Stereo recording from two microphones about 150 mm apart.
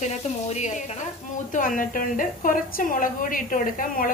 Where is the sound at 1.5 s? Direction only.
65° left (ahead or behind).